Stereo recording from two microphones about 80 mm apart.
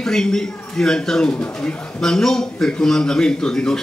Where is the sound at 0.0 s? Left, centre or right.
Centre.